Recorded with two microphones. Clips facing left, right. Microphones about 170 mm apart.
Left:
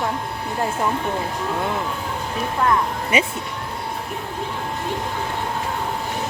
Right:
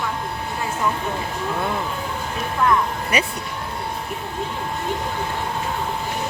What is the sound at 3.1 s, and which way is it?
Speech, 25° left (ahead or behind).